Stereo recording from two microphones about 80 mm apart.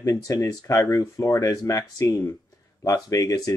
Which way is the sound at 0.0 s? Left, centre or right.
Left.